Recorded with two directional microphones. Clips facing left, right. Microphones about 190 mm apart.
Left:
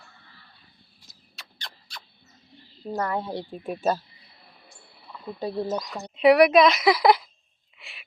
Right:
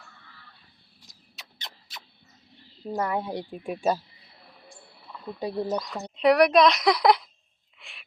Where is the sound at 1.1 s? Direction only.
20° right (ahead or behind).